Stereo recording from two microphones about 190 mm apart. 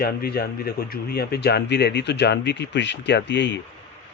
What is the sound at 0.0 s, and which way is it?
Speech, 50° left (ahead or behind).